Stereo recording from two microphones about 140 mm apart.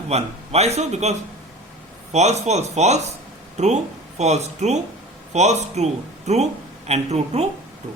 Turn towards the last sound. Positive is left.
turn(degrees=-50)  # may be behind; listen again after turning